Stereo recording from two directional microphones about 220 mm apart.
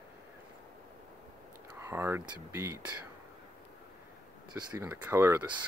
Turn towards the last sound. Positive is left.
turn(degrees=-10)  # may be behind; listen again after turning